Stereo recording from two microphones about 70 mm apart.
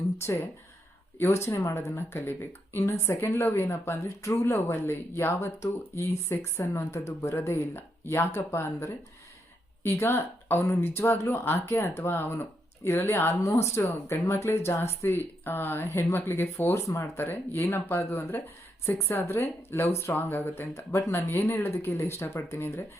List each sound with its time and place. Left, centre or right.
1.2 s speech: left
2.0 s speech: left
13.4 s speech: left
16.8 s speech: left
17.2 s speech: left
17.9 s speech: left
18.3 s speech: left
18.9 s speech: left